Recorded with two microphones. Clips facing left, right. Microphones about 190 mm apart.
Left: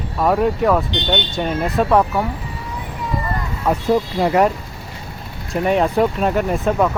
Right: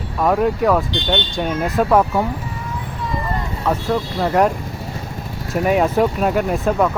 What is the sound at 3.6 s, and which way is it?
Speech, 15° left (ahead or behind).